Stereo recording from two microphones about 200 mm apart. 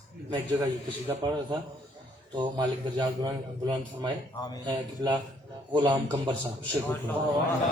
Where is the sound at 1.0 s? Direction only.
20° right (ahead or behind).